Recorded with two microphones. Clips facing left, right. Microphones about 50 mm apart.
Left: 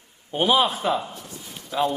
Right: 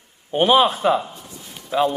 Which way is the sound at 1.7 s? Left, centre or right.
Centre.